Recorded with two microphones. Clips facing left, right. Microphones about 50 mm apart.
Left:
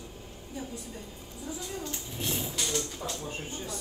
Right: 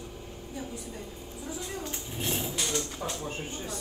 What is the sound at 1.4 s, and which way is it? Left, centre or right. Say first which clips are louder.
Speech: even; right.